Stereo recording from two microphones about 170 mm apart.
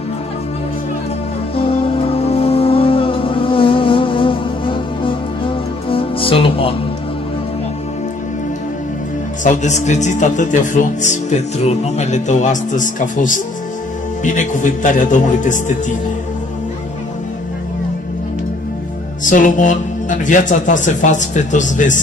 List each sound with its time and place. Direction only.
2.0 s insect: 35° left (ahead or behind)
9.4 s speech: 45° left (ahead or behind)
19.2 s speech: 50° left (ahead or behind)